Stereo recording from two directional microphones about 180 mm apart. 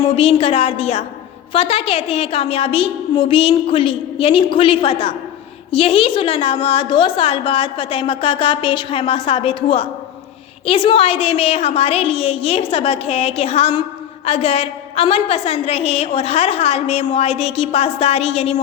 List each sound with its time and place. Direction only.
0.2 s a woman's voice: 30° left (ahead or behind)